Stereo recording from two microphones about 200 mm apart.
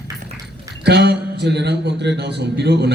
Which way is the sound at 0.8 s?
55° right (ahead or behind).